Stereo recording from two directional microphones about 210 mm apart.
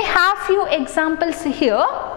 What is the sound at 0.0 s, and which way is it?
A woman's voice, 15° left (ahead or behind).